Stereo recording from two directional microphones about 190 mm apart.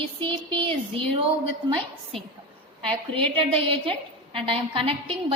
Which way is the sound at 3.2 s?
30° right (ahead or behind).